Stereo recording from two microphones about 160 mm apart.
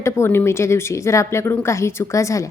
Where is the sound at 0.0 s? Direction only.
15° left (ahead or behind).